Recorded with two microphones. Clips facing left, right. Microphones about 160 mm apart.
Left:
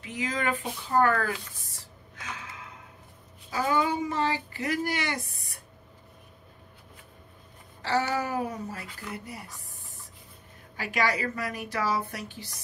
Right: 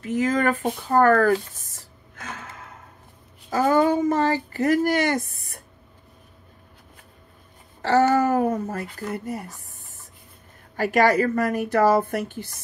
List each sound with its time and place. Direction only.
0.0 s a sound: 45° right (ahead or behind)
3.4 s speech: 50° right (ahead or behind)
7.8 s speech: 50° right (ahead or behind)
10.8 s speech: 50° right (ahead or behind)